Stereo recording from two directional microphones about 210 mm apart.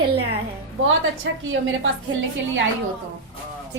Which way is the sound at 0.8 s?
65° right (ahead or behind).